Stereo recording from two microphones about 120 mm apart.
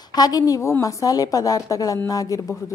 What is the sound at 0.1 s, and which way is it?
Speech, 30° left (ahead or behind).